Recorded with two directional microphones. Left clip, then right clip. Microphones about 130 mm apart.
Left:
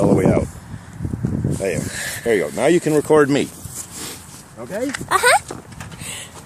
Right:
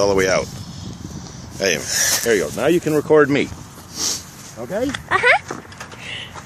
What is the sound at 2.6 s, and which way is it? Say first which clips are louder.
Speech: left 4 dB; 75° left (ahead or behind).